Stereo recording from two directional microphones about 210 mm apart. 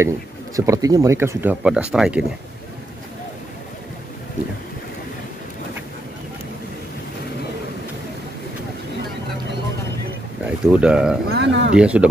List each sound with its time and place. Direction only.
0.6 s speech: 15° right (ahead or behind)
10.4 s speech: 5° right (ahead or behind)
11.2 s speech: 55° right (ahead or behind)
11.7 s speech: 5° right (ahead or behind)